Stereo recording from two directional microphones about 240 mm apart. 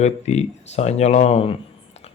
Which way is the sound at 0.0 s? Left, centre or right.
Left.